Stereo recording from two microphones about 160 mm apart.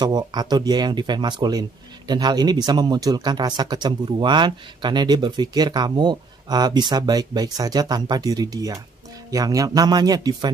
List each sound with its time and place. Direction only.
0.0 s speech: 25° right (ahead or behind)